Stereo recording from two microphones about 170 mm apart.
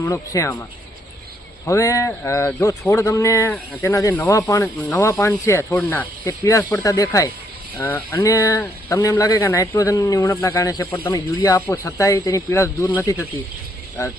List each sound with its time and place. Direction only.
0.0 s speech: 20° left (ahead or behind)
1.6 s a man's voice: 20° left (ahead or behind)